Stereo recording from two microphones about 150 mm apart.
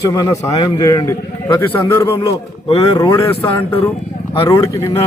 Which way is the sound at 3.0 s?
20° left (ahead or behind).